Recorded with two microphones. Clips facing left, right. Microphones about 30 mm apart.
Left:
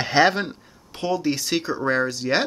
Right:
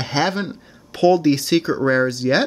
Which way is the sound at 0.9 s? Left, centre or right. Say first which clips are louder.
Right 10 dB; right.